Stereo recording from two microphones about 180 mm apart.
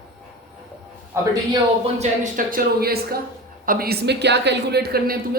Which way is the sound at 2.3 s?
55° right (ahead or behind).